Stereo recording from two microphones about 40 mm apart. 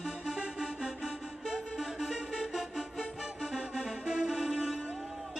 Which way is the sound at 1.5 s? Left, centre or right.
Centre.